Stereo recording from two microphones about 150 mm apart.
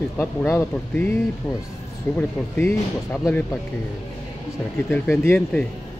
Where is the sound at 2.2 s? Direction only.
15° left (ahead or behind).